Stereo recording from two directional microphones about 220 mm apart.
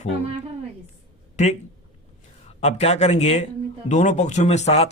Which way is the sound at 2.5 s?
30° left (ahead or behind).